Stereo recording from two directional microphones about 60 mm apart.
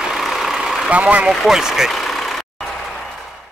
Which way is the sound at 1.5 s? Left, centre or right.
Centre.